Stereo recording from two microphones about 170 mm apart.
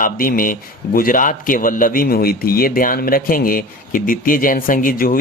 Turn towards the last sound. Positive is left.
turn(degrees=55)  # may be behind; listen again after turning